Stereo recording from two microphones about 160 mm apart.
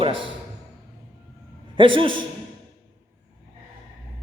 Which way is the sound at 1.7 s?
30° right (ahead or behind).